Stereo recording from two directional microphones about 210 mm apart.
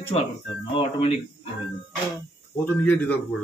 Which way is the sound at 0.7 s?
25° left (ahead or behind).